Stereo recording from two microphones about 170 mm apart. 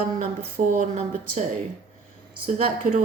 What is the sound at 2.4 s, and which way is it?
Speech, 50° right (ahead or behind).